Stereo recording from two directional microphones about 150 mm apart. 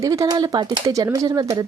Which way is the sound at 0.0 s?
25° right (ahead or behind).